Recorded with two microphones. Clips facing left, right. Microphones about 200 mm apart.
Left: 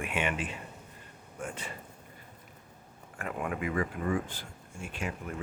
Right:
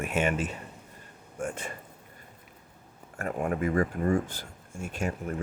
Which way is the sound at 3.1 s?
40° right (ahead or behind).